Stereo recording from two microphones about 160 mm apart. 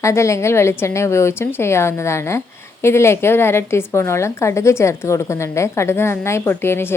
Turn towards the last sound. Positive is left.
turn(degrees=15)  # may be behind; listen again after turning